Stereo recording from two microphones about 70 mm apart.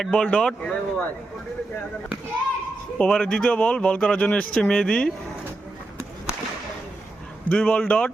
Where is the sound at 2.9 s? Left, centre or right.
Centre.